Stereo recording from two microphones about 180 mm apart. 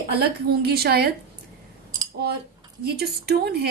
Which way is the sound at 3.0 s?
60° right (ahead or behind).